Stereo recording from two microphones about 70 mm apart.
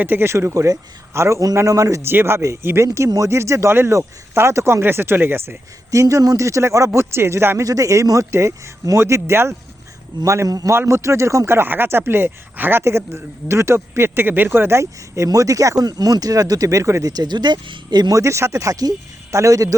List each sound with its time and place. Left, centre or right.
0.0 s speech: right
2.0 s speech: right
5.9 s speech: right
7.6 s speech: right
10.7 s speech: right
17.1 s speech: right
18.1 s speech: right